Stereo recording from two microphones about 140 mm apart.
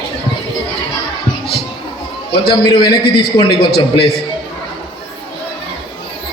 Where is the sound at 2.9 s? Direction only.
40° left (ahead or behind).